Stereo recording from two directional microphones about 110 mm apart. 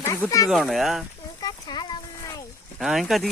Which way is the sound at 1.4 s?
40° left (ahead or behind).